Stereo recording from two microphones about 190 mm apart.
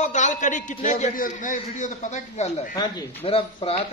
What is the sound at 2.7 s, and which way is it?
Speech, 25° left (ahead or behind).